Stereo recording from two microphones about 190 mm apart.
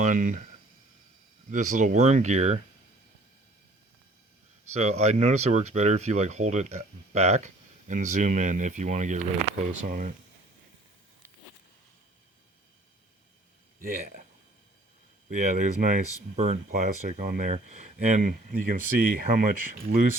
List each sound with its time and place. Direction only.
0.0 s speech: 40° right (ahead or behind)
1.5 s speech: 40° right (ahead or behind)
4.7 s speech: 35° right (ahead or behind)
13.8 s speech: 45° right (ahead or behind)
15.3 s speech: 40° right (ahead or behind)